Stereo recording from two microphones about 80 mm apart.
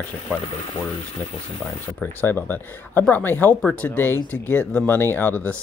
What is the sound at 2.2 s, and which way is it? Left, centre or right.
Speech, left.